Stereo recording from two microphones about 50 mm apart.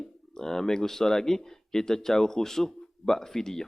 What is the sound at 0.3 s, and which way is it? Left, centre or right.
Speech, centre.